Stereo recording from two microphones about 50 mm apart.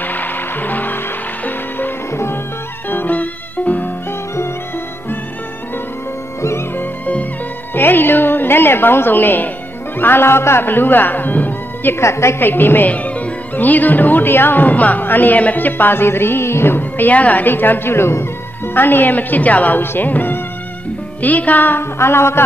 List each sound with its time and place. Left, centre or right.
0.0 s music: left
2.9 s music: left
6.8 s music: left
7.7 s speech: left
12.0 s a woman's voice: left
12.4 s speech: left
12.9 s speech: left
17.1 s speech: left
18.7 s a woman's voice: left